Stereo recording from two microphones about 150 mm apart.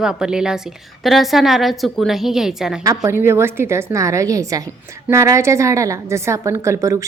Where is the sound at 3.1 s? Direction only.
15° right (ahead or behind).